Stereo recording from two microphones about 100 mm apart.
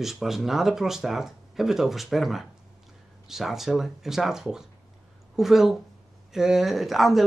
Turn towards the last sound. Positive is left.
turn(degrees=0)  # may be behind; listen again after turning